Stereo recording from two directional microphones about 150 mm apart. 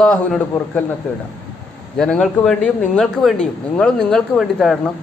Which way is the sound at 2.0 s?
5° left (ahead or behind).